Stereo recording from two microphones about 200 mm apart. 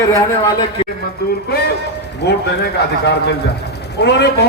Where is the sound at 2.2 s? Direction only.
55° left (ahead or behind).